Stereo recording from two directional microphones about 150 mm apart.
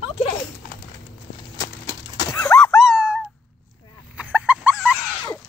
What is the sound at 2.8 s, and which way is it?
Dog, 5° right (ahead or behind).